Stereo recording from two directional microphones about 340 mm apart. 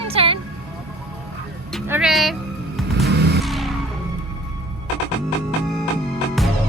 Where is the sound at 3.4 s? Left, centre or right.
Centre.